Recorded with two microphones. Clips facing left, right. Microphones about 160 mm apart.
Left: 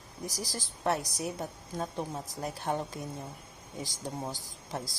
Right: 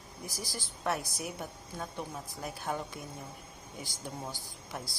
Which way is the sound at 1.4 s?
40° left (ahead or behind).